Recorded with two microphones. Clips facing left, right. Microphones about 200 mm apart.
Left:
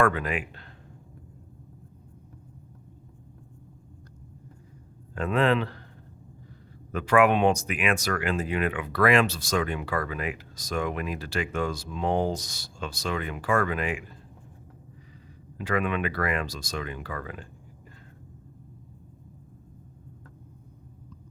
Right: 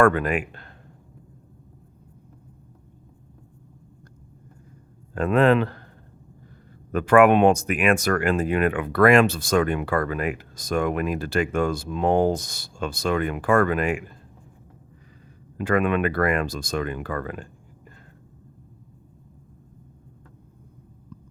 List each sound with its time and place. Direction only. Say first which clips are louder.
0.0 s speech: right 6 dB; 50° right (ahead or behind)
5.1 s speech: right 6 dB; 50° right (ahead or behind)
6.9 s speech: right 5 dB; 50° right (ahead or behind)
15.5 s speech: right 6 dB; 50° right (ahead or behind)